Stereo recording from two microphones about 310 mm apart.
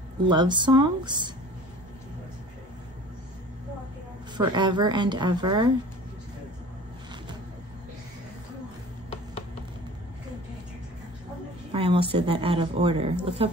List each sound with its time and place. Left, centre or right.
0.3 s a woman's voice: centre
4.4 s a woman's voice: centre
11.7 s a woman's voice: centre